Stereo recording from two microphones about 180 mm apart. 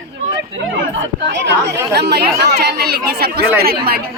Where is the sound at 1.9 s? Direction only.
65° right (ahead or behind).